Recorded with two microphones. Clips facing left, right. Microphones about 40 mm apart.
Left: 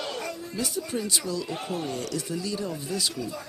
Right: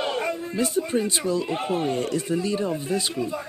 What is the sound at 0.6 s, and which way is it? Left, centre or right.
Speech, right.